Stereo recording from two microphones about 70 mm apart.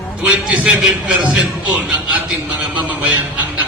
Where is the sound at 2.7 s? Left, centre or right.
Right.